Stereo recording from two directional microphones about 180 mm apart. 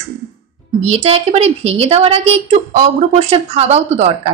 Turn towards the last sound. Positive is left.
turn(degrees=-35)  # may be behind; listen again after turning